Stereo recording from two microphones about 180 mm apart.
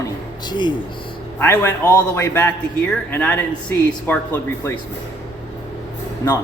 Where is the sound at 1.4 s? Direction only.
15° left (ahead or behind).